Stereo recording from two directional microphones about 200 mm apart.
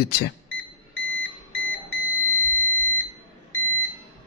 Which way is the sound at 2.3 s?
10° left (ahead or behind).